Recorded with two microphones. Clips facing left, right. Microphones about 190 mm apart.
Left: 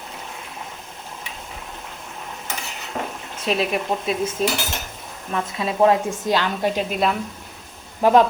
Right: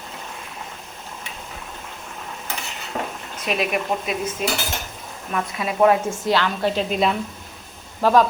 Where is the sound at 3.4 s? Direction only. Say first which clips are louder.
Left 1 dB; 30° left (ahead or behind); by 7.0 s 10° left (ahead or behind).